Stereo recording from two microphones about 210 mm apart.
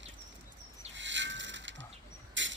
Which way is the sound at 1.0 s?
60° right (ahead or behind).